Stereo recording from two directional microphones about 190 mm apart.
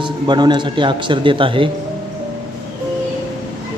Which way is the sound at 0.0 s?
25° right (ahead or behind).